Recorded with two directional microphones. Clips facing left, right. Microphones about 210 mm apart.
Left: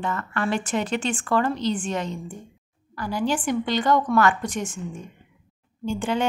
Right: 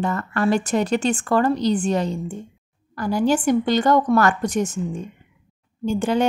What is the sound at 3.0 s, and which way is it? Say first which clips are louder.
Speech: right 6 dB; 45° right (ahead or behind).